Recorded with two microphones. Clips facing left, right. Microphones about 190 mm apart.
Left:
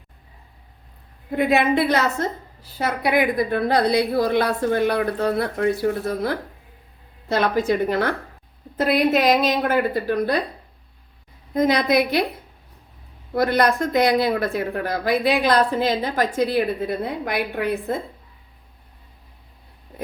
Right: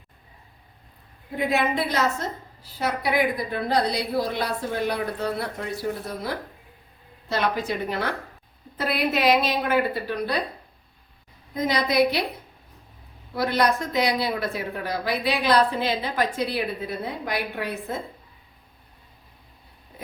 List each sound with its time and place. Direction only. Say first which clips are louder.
1.4 s a woman's voice: left 5 dB; 65° left (ahead or behind)
11.5 s speech: left 4 dB; 50° left (ahead or behind)
13.3 s speech: left 4 dB; 50° left (ahead or behind)